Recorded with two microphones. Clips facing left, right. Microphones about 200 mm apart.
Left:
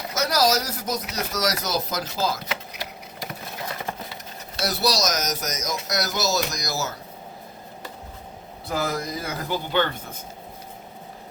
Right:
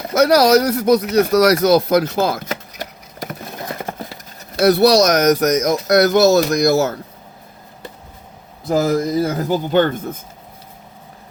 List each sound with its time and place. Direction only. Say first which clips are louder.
0.1 s speech: right 11 dB; 60° right (ahead or behind)
2.5 s engine: right 5 dB; 45° right (ahead or behind)
3.8 s a sound: right 5 dB; 45° right (ahead or behind); by 5.7 s 60° right (ahead or behind)
5.9 s speech: right 14 dB; 60° right (ahead or behind)
8.7 s speech: right 11 dB; 40° right (ahead or behind)